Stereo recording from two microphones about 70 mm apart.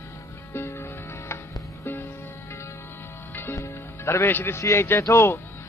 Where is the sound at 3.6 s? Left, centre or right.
Left.